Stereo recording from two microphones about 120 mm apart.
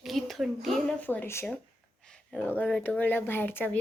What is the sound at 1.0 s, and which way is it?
Speech, 15° left (ahead or behind).